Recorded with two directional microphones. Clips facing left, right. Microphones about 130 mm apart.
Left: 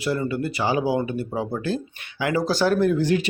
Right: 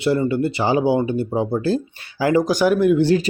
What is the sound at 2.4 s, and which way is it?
Speech, 15° right (ahead or behind).